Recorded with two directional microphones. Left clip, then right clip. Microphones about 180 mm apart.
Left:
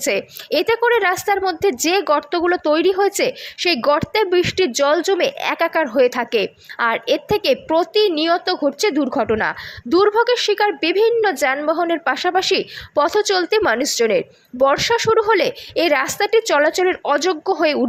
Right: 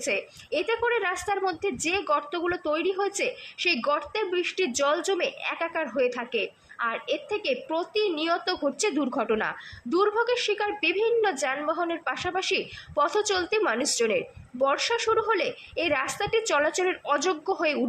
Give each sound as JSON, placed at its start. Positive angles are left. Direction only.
{"t": 0.0, "sound": "a woman's voice", "side_deg": 20}